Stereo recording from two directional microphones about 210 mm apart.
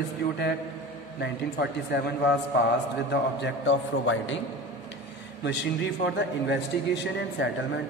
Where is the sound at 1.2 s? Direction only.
50° left (ahead or behind).